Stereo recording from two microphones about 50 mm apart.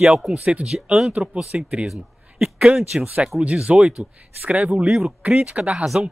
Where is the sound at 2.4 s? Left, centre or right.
Centre.